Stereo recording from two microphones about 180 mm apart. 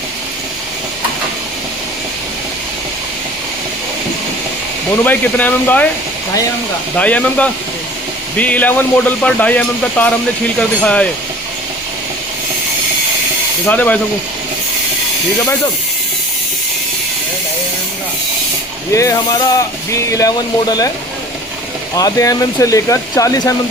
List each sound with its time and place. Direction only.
5.0 s speech: 10° left (ahead or behind)
6.9 s speech: 5° left (ahead or behind)
13.7 s speech: 10° left (ahead or behind)
18.9 s speech: 20° left (ahead or behind)
21.9 s speech: 20° left (ahead or behind)